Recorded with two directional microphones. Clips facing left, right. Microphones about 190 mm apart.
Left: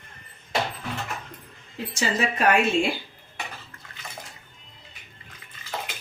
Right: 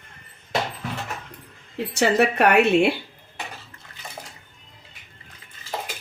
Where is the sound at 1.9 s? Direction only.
65° right (ahead or behind).